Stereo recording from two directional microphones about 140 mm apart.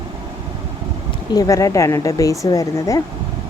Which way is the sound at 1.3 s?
25° left (ahead or behind).